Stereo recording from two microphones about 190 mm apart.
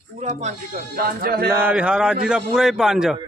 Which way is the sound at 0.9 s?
55° right (ahead or behind).